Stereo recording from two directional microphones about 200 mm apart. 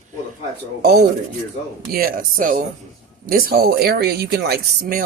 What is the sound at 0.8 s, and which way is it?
Speech, 55° right (ahead or behind).